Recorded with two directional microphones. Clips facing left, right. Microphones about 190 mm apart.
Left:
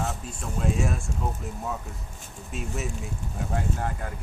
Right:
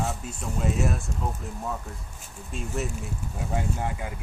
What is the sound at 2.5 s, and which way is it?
Speech, centre (ahead or behind).